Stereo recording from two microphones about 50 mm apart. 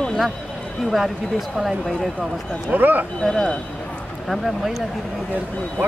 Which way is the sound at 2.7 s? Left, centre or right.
Right.